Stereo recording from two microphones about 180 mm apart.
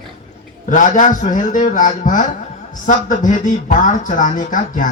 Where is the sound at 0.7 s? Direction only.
45° left (ahead or behind).